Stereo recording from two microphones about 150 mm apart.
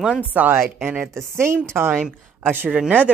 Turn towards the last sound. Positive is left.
turn(degrees=-10)  # may be behind; listen again after turning